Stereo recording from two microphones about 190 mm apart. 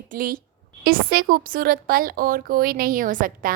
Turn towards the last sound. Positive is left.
turn(degrees=-45)  # may be behind; listen again after turning